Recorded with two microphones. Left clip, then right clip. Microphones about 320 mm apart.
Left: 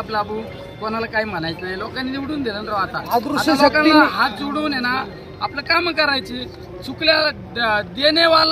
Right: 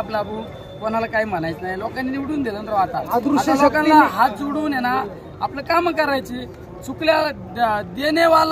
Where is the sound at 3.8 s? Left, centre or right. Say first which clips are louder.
Even; centre.